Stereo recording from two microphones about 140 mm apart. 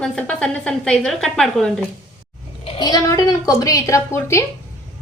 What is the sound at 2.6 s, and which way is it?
A woman's voice, 35° left (ahead or behind).